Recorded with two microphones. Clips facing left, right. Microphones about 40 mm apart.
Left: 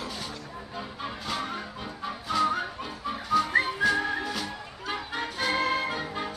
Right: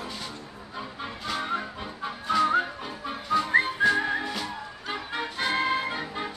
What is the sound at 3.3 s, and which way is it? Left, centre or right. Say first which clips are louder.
Whistling: right 1 dB; centre.